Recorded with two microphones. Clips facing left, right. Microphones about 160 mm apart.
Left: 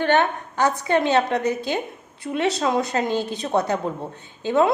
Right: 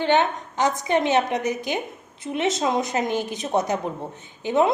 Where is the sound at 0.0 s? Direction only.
20° right (ahead or behind).